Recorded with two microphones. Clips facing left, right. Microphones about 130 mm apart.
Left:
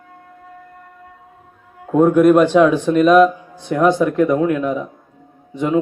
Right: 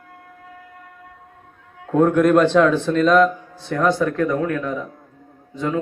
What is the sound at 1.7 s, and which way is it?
Speech, 5° left (ahead or behind).